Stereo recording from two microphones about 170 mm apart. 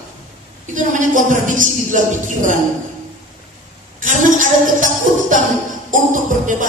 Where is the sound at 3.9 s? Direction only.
50° right (ahead or behind).